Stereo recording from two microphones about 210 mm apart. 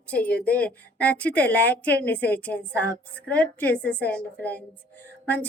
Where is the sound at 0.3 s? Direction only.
5° left (ahead or behind).